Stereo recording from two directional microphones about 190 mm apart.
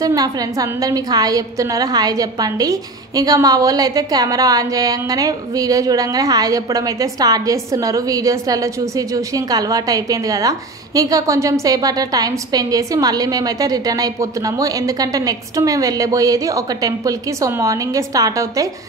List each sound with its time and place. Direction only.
0.0 s a woman's voice: 20° right (ahead or behind)